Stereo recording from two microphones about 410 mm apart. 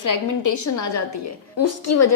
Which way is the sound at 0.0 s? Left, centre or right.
Left.